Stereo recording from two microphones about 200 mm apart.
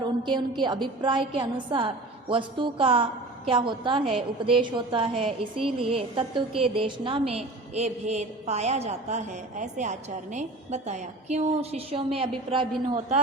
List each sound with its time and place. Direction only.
0.0 s a woman's voice: 25° right (ahead or behind)